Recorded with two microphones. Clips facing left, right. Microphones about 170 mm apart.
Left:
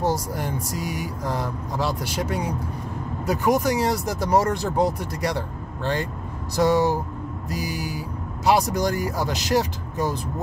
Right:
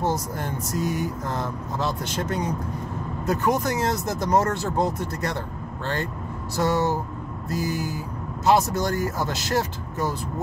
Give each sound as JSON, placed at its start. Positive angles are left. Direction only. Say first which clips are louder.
{"t": 0.0, "sound": "speech", "louder": "left 2 dB", "side_deg": 10}
{"t": 6.5, "sound": "speech", "louder": "left 3 dB", "side_deg": 15}